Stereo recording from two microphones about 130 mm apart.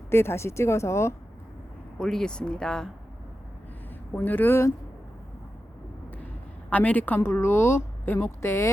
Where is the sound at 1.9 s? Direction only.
5° left (ahead or behind).